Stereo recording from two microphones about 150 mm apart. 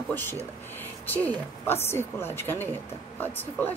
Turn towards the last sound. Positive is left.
turn(degrees=10)  # may be behind; listen again after turning